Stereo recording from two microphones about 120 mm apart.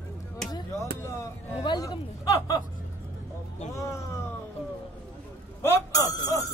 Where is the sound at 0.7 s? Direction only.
20° left (ahead or behind).